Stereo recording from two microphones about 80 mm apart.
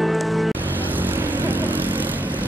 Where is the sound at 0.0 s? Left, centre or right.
Centre.